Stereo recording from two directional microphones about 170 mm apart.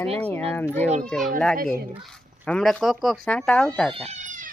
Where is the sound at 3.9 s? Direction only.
40° right (ahead or behind).